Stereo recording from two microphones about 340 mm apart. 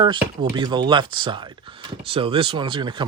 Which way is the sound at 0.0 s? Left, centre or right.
Centre.